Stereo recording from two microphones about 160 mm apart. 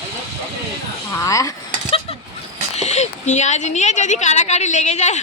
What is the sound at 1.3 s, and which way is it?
Speech, 20° left (ahead or behind).